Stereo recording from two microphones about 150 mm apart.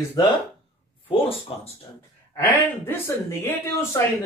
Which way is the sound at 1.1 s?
40° left (ahead or behind).